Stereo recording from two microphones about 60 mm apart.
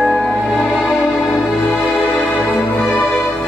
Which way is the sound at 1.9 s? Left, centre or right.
Centre.